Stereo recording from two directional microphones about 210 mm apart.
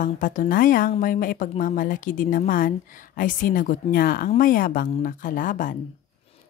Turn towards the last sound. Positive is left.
turn(degrees=40)  # may be behind; listen again after turning